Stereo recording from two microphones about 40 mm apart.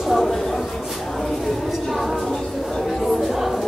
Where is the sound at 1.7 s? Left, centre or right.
Centre.